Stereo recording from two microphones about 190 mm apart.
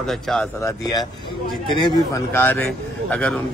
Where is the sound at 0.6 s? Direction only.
20° left (ahead or behind).